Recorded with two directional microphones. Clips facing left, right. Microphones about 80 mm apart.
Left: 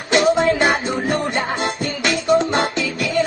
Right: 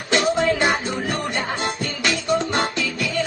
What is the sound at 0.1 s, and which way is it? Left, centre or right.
Music, left.